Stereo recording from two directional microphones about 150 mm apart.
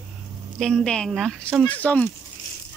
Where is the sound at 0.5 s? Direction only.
5° left (ahead or behind).